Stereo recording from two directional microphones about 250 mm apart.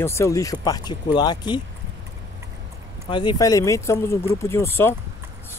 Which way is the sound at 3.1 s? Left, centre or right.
Centre.